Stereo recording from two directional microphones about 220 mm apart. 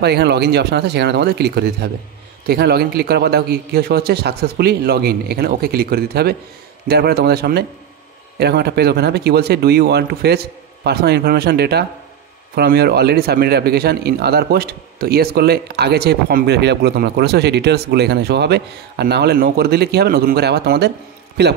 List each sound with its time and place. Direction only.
0.0 s a man's voice: 50° right (ahead or behind)